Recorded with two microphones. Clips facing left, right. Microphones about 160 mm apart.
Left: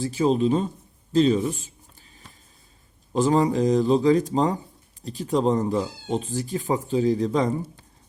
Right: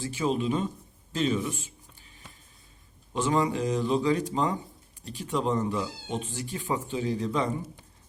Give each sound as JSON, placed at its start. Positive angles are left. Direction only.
{"t": 0.0, "sound": "speech", "side_deg": 35}
{"t": 3.1, "sound": "speech", "side_deg": 35}